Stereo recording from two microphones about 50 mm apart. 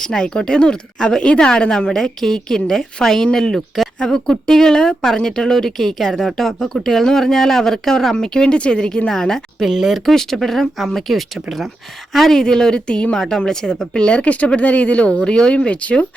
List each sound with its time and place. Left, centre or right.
0.0 s a woman's voice: centre
9.6 s a woman's voice: centre; by 16.0 s left